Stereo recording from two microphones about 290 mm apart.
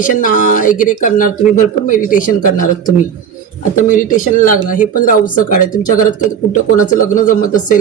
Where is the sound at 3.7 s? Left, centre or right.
Left.